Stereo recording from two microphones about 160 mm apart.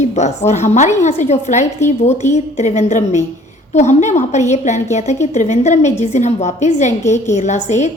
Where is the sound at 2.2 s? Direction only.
15° left (ahead or behind).